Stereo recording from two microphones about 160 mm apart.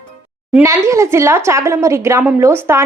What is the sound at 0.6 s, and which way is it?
Speech, 20° right (ahead or behind).